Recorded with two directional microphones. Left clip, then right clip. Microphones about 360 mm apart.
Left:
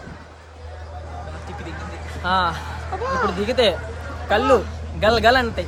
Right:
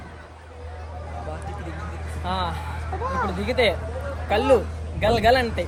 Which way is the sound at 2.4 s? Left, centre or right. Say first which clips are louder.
Left 6 dB; centre.